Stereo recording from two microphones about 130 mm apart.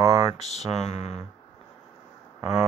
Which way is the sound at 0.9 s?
60° left (ahead or behind).